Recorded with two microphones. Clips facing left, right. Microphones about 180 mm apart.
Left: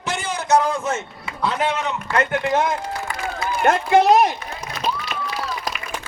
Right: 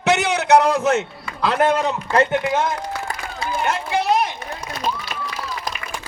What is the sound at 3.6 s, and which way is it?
Speech, 50° left (ahead or behind).